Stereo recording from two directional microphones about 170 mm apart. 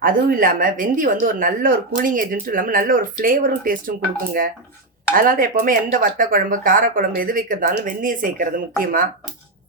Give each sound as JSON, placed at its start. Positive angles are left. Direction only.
{"t": 0.0, "sound": "speech", "side_deg": -55}
{"t": 5.1, "sound": "speech", "side_deg": -55}